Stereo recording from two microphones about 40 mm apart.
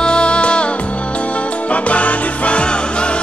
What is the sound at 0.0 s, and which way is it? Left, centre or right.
Music, left.